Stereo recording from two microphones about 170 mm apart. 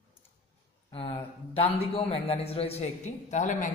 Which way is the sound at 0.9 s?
30° left (ahead or behind).